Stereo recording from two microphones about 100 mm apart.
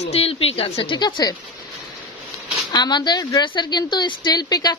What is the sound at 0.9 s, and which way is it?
Speech, 45° left (ahead or behind).